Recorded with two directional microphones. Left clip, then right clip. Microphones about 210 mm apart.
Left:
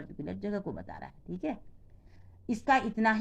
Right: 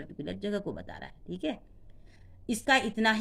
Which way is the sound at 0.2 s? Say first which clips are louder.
Right 2 dB; 40° right (ahead or behind).